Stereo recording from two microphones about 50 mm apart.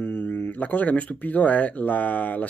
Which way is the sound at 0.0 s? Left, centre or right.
Left.